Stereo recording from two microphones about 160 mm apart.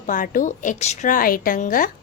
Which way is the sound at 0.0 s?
55° left (ahead or behind).